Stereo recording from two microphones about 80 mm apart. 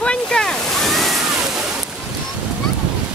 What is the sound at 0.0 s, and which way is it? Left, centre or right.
Waterfall, centre.